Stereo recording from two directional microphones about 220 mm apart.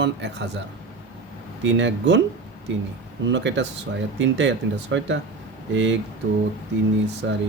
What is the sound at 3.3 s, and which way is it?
Speech, 55° right (ahead or behind).